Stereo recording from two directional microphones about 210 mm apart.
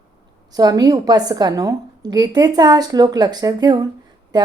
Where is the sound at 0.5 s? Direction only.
20° right (ahead or behind).